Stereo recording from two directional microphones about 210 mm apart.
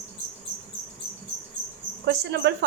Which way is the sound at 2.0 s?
55° right (ahead or behind).